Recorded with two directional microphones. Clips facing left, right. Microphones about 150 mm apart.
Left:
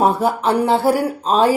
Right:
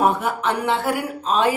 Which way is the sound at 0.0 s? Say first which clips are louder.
Left 4 dB; 35° left (ahead or behind).